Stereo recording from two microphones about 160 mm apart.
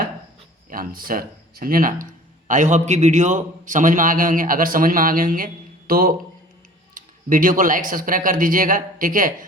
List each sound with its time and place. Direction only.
0.7 s a man's voice: 60° right (ahead or behind)
6.9 s a man's voice: 55° right (ahead or behind)